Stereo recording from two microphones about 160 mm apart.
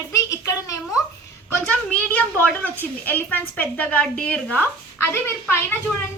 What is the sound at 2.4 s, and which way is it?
A woman's voice, 10° left (ahead or behind).